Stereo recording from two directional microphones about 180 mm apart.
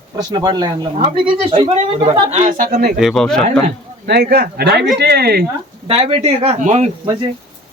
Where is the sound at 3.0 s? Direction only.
Centre (ahead or behind).